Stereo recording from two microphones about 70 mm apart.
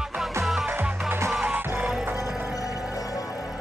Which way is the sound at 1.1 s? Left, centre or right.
Right.